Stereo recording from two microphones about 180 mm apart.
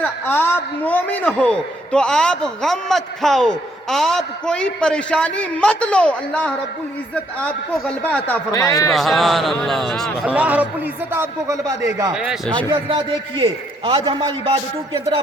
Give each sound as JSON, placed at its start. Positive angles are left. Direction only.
{"t": 0.0, "sound": "a man's voice", "side_deg": 10}
{"t": 8.5, "sound": "a man's voice", "side_deg": 20}
{"t": 8.9, "sound": "a man's voice", "side_deg": 0}
{"t": 12.1, "sound": "a man's voice", "side_deg": -5}
{"t": 12.5, "sound": "a man's voice", "side_deg": -25}